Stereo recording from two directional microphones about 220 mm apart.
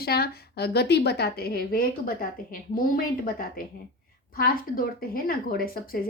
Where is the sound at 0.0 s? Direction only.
45° left (ahead or behind).